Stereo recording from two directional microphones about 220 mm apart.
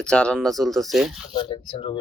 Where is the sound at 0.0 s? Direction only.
5° left (ahead or behind).